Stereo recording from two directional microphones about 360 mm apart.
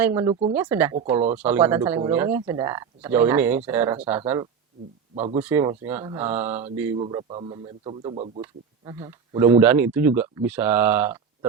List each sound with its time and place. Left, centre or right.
0.0 s a man's voice: centre